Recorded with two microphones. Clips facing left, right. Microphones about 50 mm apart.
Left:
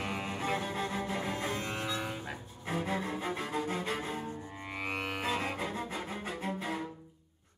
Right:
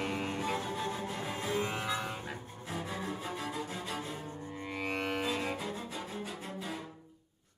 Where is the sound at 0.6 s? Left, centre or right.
Left.